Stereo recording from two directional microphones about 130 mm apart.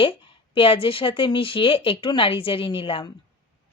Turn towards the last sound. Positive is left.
turn(degrees=45)  # may be behind; listen again after turning